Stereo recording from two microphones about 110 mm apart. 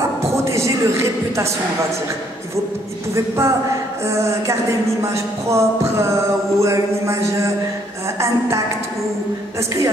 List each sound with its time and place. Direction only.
0.2 s music: 25° right (ahead or behind)
3.2 s a woman's voice: 25° right (ahead or behind)